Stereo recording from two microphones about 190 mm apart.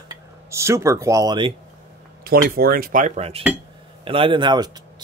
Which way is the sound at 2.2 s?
50° right (ahead or behind).